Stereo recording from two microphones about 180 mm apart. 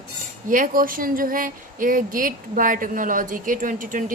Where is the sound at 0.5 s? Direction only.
50° right (ahead or behind).